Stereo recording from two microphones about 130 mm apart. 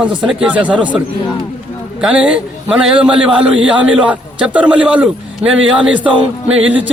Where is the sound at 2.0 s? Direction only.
10° right (ahead or behind).